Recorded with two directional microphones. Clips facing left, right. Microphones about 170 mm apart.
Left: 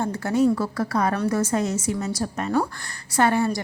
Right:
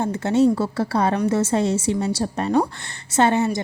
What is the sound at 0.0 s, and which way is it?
A woman's voice, 25° right (ahead or behind).